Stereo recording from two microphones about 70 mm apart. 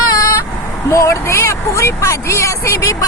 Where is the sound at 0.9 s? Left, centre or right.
Left.